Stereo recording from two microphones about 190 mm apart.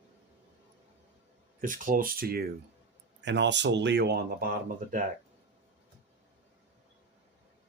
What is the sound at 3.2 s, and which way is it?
Speech, 70° right (ahead or behind).